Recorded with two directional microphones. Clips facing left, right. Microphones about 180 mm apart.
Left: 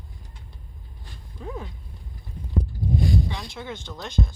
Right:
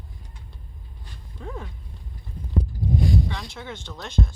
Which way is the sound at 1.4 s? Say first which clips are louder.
Left 1 dB; 5° left (ahead or behind).